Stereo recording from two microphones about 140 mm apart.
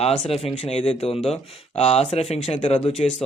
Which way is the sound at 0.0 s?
45° left (ahead or behind).